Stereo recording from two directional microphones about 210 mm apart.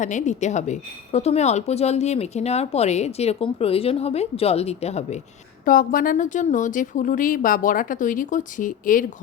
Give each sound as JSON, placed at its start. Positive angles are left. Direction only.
{"t": 0.0, "sound": "speech", "side_deg": 35}
{"t": 5.6, "sound": "speech", "side_deg": 40}